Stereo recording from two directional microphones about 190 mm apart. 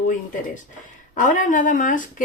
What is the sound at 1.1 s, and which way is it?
Speech, 45° left (ahead or behind).